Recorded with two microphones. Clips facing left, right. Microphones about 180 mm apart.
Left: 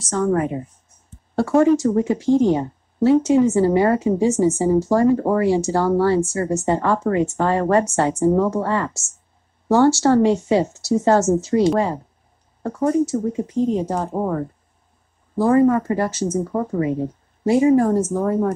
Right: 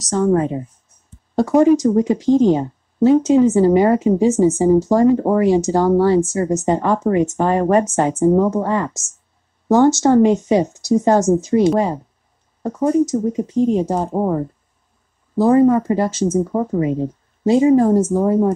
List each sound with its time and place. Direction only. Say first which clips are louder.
0.3 s a woman's voice: right 3 dB; 25° right (ahead or behind)